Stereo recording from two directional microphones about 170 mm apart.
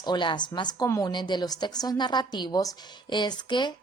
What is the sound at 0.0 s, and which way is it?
A woman's voice, 25° left (ahead or behind).